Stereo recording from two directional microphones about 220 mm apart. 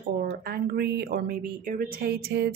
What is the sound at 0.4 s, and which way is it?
A woman's voice, 40° right (ahead or behind).